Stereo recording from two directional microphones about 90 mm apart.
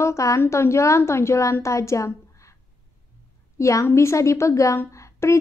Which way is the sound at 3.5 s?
35° left (ahead or behind).